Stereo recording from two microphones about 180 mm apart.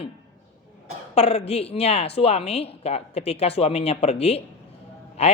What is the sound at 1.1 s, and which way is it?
A man's voice, 35° left (ahead or behind).